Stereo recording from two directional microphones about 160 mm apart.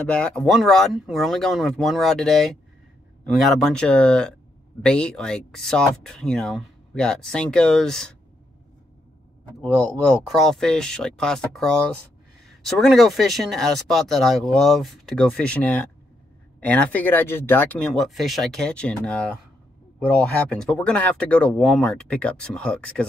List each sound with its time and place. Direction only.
0.0 s speech: 5° left (ahead or behind)
10.2 s speech: centre (ahead or behind)